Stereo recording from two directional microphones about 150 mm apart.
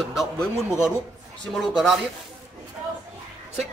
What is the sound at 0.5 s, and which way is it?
Speech, 15° left (ahead or behind).